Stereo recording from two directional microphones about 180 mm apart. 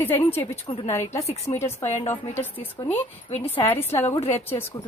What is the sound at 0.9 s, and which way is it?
A woman's voice, 15° left (ahead or behind).